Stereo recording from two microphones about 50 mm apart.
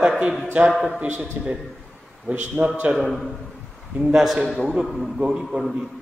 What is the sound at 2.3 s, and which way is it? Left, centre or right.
Speech, right.